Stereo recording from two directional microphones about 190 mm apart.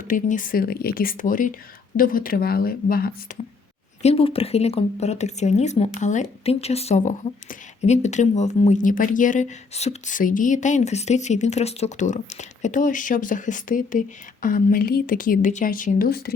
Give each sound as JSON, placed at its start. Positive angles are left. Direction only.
{"t": 0.0, "sound": "speech", "side_deg": 45}
{"t": 4.0, "sound": "speech", "side_deg": 30}